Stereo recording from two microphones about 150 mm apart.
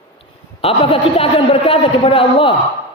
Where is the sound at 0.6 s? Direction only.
40° left (ahead or behind).